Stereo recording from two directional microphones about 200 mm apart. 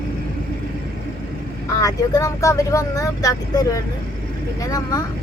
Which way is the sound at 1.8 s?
15° left (ahead or behind).